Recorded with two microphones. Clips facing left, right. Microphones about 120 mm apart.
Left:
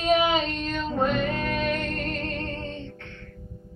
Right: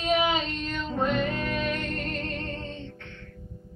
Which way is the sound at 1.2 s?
55° left (ahead or behind).